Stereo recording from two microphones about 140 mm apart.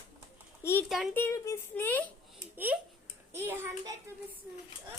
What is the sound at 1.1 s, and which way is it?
Speech, 20° left (ahead or behind).